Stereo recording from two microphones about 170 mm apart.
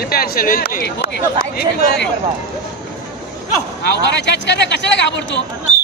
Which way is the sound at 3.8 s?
85° left.